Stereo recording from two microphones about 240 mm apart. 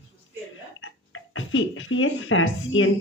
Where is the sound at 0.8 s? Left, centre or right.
Left.